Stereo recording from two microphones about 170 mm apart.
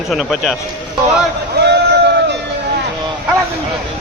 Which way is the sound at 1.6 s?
75° right (ahead or behind).